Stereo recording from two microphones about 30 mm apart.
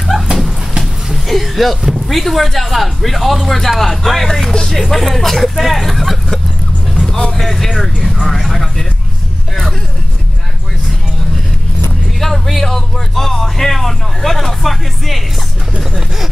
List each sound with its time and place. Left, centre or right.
0.1 s dog: centre
1.1 s a sound: centre
1.8 s a sound: centre
2.0 s speech: centre
7.3 s speech: centre
12.2 s speech: centre